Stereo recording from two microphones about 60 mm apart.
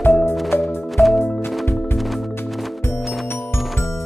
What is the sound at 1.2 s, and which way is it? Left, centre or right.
Music, left.